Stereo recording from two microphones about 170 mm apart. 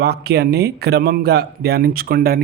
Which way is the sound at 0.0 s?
70° right (ahead or behind).